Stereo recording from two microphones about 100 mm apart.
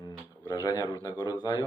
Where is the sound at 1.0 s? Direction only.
45° left (ahead or behind).